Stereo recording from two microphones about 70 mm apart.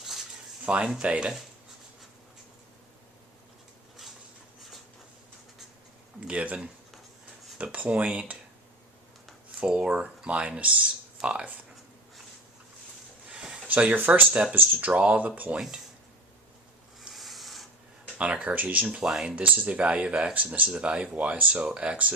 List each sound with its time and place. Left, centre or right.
0.6 s speech: centre
6.1 s speech: centre
9.6 s speech: centre
13.2 s a sound: centre
13.7 s speech: right
17.0 s rub: centre
18.2 s speech: centre
19.0 s speech: centre
19.4 s speech: right